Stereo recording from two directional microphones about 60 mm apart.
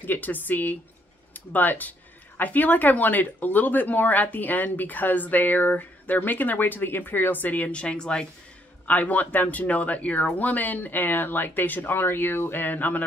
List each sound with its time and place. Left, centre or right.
0.0 s speech: left; by 8.3 s centre
8.8 s speech: left